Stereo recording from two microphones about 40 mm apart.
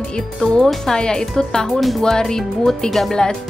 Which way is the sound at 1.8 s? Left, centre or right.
Centre.